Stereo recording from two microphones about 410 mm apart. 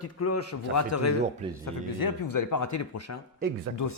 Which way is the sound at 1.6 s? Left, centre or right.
Left.